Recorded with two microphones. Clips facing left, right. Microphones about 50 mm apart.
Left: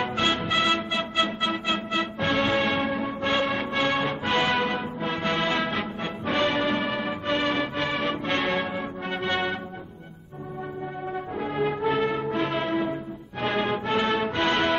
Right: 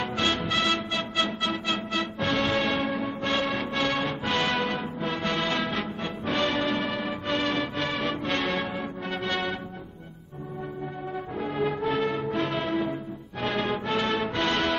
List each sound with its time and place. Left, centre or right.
0.0 s music: centre
11.3 s music: centre